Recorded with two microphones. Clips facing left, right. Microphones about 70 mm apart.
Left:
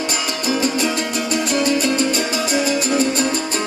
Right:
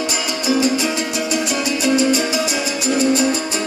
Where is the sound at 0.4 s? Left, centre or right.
Left.